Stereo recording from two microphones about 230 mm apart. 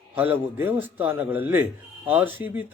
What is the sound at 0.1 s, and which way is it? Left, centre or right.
Speech, centre.